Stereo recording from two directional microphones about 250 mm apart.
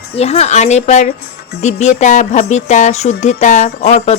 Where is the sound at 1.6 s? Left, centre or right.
Left.